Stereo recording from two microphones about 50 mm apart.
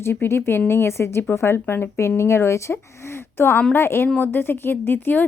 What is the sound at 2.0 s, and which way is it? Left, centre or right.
Speech, left.